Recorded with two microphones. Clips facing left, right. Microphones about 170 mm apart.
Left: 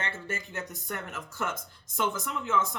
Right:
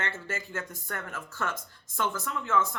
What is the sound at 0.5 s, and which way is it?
Speech, 20° left (ahead or behind).